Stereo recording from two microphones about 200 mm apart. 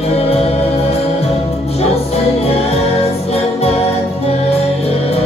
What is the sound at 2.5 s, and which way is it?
Music, 30° left (ahead or behind).